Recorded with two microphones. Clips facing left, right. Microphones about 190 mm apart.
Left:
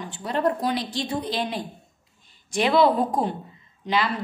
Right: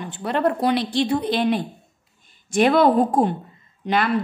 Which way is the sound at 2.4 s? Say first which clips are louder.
Right 3 dB; 50° right (ahead or behind).